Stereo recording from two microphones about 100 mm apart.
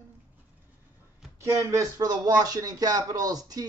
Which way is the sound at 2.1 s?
40° right (ahead or behind).